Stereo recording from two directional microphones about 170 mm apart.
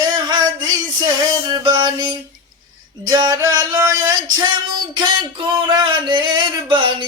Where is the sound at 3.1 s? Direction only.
20° right (ahead or behind).